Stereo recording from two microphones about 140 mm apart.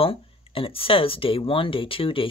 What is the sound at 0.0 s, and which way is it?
Speech, 40° left (ahead or behind).